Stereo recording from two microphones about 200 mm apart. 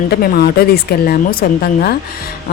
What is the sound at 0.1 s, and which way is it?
Speech, 50° left (ahead or behind).